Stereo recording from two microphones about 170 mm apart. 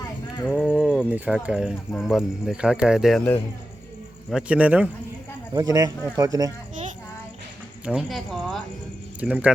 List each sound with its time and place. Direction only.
0.4 s a sound: centre (ahead or behind)
1.5 s a man's voice: 5° right (ahead or behind)
5.5 s speech: 20° right (ahead or behind)
7.9 s a man's voice: 5° right (ahead or behind)
9.2 s a man's voice: 10° right (ahead or behind)